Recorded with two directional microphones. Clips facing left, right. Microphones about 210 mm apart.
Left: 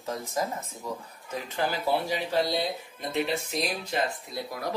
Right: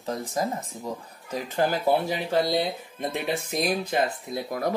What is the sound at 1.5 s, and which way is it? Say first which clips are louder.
Speech: right 5 dB; 45° right (ahead or behind).